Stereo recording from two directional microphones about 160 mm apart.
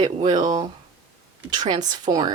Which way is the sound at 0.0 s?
30° right (ahead or behind).